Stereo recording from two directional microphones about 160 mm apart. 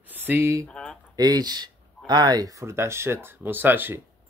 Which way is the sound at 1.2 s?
25° right (ahead or behind).